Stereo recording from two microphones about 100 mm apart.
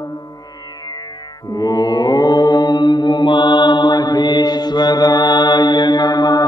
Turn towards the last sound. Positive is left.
turn(degrees=40)  # may be behind; listen again after turning